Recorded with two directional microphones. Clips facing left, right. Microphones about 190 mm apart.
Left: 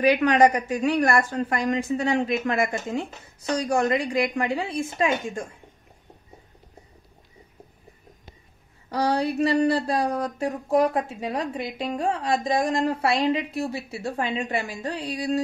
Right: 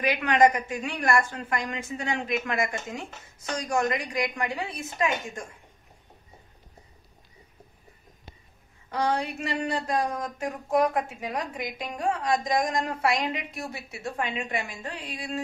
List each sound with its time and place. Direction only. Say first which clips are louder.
0.0 s speech: left 4 dB; 35° left (ahead or behind)
8.9 s speech: left 4 dB; 35° left (ahead or behind)